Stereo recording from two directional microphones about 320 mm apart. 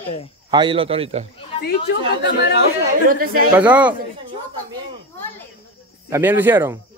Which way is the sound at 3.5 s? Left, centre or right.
Centre.